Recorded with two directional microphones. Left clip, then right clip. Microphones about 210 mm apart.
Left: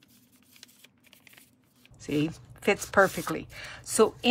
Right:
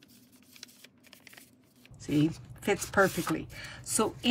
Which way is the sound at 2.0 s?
10° left (ahead or behind).